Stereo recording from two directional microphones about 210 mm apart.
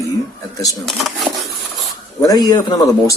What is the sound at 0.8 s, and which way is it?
Speech, centre (ahead or behind).